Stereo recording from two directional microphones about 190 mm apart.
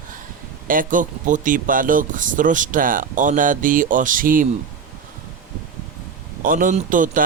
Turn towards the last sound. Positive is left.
turn(degrees=-45)  # may be behind; listen again after turning